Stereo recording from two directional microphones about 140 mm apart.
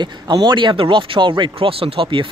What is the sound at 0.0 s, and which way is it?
Speech, 35° right (ahead or behind).